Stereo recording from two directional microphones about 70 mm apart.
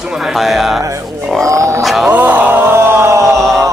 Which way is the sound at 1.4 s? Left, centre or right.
Right.